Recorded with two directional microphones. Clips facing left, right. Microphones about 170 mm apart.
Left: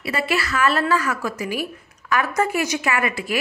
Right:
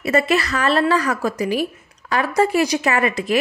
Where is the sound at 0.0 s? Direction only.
40° right (ahead or behind).